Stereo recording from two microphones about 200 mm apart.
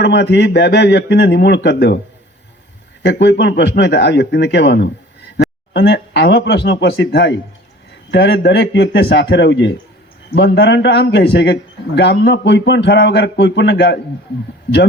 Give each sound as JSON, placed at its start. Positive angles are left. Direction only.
{"t": 0.0, "sound": "a man's voice", "side_deg": 60}
{"t": 3.0, "sound": "a man's voice", "side_deg": 60}